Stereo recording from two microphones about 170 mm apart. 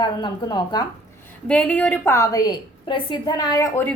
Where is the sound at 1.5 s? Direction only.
10° left (ahead or behind).